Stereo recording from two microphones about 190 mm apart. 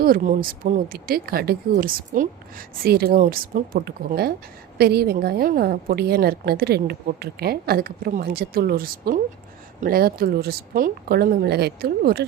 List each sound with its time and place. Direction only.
0.0 s a woman's voice: 50° right (ahead or behind)